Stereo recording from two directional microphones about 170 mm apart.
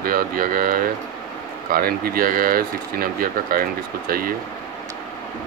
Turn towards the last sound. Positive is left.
turn(degrees=-60)  # may be behind; listen again after turning